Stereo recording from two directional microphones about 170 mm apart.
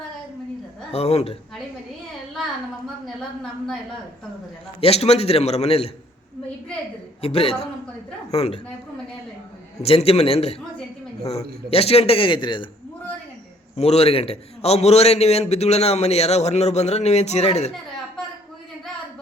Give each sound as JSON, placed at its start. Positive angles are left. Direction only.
{"t": 0.9, "sound": "a man's voice", "side_deg": 40}
{"t": 4.8, "sound": "a man's voice", "side_deg": 35}
{"t": 7.2, "sound": "a man's voice", "side_deg": 35}
{"t": 9.8, "sound": "a man's voice", "side_deg": 35}
{"t": 13.7, "sound": "a man's voice", "side_deg": 40}